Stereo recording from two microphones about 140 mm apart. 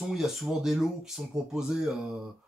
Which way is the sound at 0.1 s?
Centre (ahead or behind).